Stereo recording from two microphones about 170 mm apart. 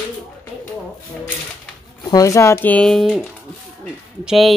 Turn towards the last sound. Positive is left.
turn(degrees=0)  # may be behind; listen again after turning